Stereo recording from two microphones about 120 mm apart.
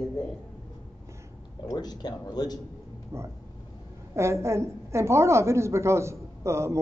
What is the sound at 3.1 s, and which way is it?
A woman's voice, 25° right (ahead or behind).